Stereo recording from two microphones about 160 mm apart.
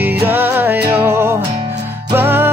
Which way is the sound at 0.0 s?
10° right (ahead or behind).